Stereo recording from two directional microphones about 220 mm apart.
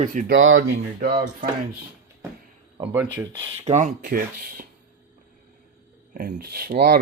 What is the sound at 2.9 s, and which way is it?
Speech, 10° right (ahead or behind).